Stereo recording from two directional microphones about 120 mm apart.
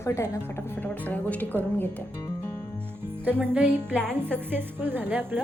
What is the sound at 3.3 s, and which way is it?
A woman's voice, 15° right (ahead or behind).